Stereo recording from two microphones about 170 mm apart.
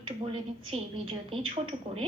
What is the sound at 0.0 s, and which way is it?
A woman's voice, 35° right (ahead or behind).